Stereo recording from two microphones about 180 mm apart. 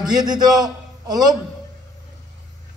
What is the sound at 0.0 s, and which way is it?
A man's voice, 20° right (ahead or behind).